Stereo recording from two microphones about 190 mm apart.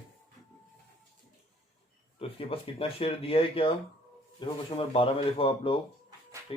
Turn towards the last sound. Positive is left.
turn(degrees=30)  # may be behind; listen again after turning